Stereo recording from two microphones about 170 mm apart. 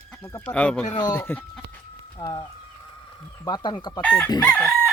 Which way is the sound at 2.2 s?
25° left (ahead or behind).